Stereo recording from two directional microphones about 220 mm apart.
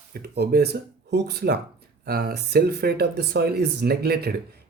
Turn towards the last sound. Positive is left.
turn(degrees=-45)  # may be behind; listen again after turning